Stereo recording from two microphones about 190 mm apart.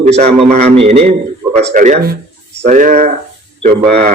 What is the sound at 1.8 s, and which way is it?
A man's voice, 45° right (ahead or behind).